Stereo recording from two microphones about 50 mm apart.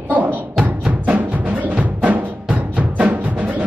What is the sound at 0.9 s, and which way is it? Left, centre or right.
Music, right.